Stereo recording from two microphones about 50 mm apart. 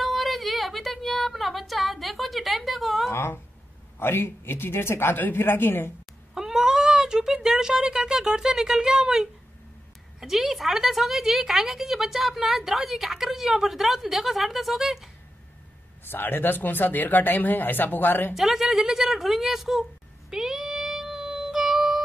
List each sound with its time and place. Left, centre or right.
0.0 s a sound: centre
3.1 s a sound: left
4.0 s speech: left
5.2 s speech: left
6.3 s speech: centre
16.1 s speech: left
18.3 s speech: centre
20.2 s child singing: centre